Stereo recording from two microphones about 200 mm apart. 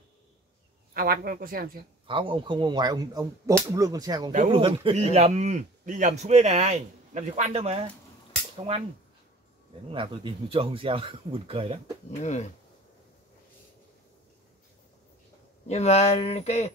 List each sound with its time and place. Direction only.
0.9 s speech: 50° right (ahead or behind)
2.0 s a man's voice: 25° right (ahead or behind)
9.8 s speech: 25° right (ahead or behind)
12.2 s speech: 35° left (ahead or behind)
15.6 s speech: 35° left (ahead or behind)